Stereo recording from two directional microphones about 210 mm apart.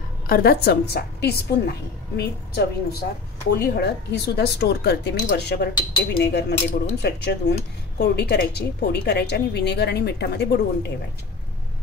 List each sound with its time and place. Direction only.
0.3 s a woman's voice: 45° left (ahead or behind)